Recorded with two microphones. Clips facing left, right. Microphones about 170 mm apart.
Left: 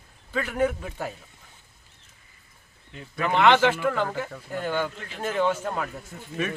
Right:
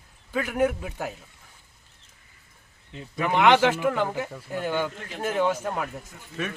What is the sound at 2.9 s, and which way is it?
A man's voice, 15° right (ahead or behind).